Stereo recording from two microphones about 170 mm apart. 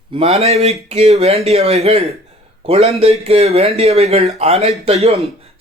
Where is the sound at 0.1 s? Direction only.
40° right (ahead or behind).